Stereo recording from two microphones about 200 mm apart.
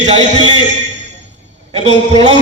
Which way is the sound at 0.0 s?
30° right (ahead or behind).